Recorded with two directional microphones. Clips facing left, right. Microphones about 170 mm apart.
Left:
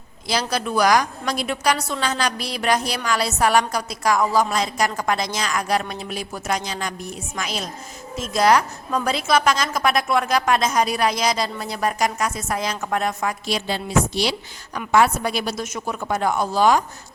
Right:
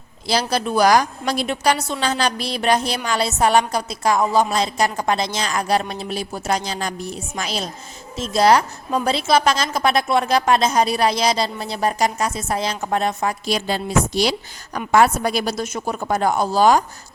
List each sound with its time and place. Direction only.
0.3 s a woman's voice: 30° right (ahead or behind)
13.4 s a woman's voice: 45° right (ahead or behind)